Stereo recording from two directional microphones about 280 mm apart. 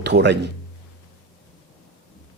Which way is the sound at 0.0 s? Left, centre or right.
Right.